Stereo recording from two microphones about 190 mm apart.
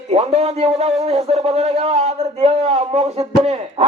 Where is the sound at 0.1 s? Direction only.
35° right (ahead or behind).